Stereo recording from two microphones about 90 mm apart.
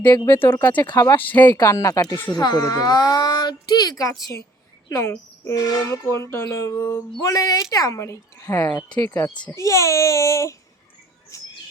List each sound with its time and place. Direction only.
0.3 s speech: 25° left (ahead or behind)
1.6 s a child's voice: 40° left (ahead or behind)
11.3 s bird: 35° left (ahead or behind)